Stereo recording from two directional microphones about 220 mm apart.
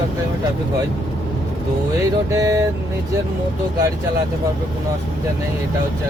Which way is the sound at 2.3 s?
15° right (ahead or behind).